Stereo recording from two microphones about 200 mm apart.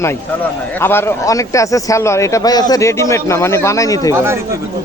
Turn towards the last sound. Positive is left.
turn(degrees=15)  # may be behind; listen again after turning